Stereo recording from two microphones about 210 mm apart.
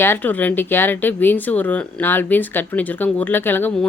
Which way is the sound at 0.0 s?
10° left (ahead or behind).